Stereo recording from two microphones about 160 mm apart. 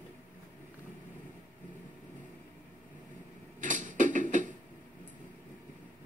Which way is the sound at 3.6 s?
55° right (ahead or behind).